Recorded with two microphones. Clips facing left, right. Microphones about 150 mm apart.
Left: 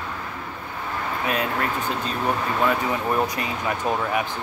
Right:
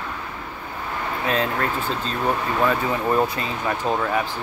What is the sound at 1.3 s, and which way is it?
Speech, 15° left (ahead or behind).